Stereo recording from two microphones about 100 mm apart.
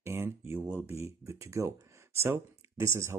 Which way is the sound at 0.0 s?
25° right (ahead or behind).